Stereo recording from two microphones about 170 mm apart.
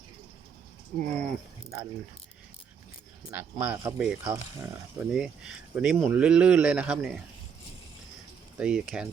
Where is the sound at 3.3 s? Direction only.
10° right (ahead or behind).